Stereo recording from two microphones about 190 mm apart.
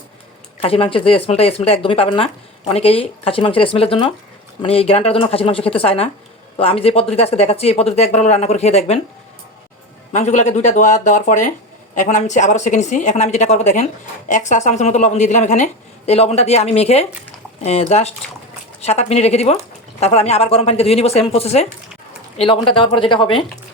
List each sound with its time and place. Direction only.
0.6 s speech: 30° left (ahead or behind)
10.1 s speech: 35° left (ahead or behind)